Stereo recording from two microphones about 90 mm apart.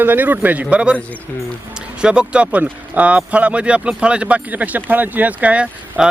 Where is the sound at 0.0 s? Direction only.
20° right (ahead or behind).